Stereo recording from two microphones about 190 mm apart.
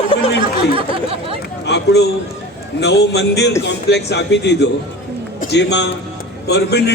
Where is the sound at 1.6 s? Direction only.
65° left (ahead or behind).